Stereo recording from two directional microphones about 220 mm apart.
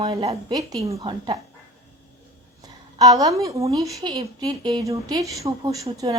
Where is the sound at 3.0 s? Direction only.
15° right (ahead or behind).